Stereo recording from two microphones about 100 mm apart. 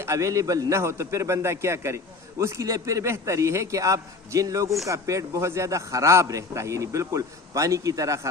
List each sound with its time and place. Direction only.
0.0 s a man's voice: 30° right (ahead or behind)